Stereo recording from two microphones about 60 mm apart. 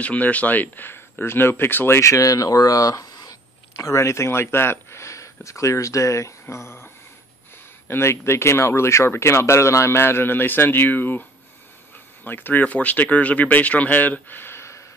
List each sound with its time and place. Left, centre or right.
0.0 s speech: left
2.0 s speech: left
3.7 s speech: left
7.9 s speech: left
12.3 s speech: left